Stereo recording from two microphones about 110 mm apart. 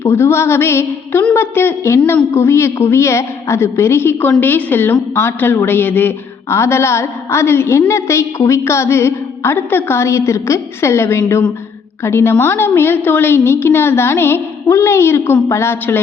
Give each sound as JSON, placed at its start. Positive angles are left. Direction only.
{"t": 0.0, "sound": "a woman's voice", "side_deg": 25}